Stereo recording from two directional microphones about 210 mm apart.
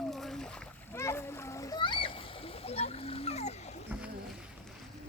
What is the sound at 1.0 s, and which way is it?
Splash, 10° left (ahead or behind).